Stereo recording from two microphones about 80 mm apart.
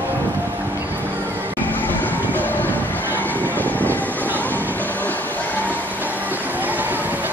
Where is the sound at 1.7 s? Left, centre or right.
Left.